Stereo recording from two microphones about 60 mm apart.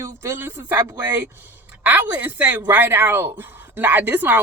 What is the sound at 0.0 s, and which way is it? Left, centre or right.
Speech, right.